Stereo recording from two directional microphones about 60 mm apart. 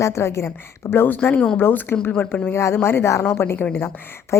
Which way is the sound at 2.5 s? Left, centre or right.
Left.